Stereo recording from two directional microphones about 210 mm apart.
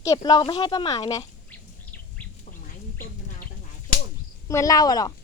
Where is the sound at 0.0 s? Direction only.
15° left (ahead or behind).